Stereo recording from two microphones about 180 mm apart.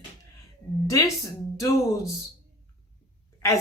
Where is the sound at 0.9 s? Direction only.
20° left (ahead or behind).